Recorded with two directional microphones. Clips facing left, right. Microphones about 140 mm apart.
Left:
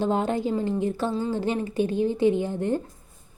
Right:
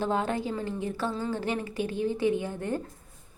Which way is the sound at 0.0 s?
20° left (ahead or behind).